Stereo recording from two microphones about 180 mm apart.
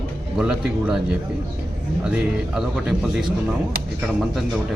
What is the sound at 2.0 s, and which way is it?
A man's voice, 5° right (ahead or behind).